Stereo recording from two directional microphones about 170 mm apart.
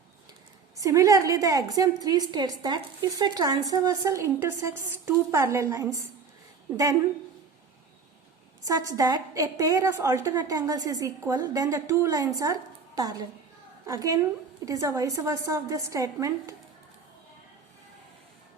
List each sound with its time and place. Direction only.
0.8 s a woman's voice: 20° right (ahead or behind)
8.6 s a woman's voice: 20° right (ahead or behind)